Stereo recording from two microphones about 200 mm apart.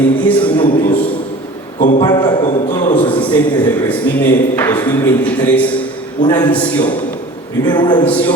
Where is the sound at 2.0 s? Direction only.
20° left (ahead or behind).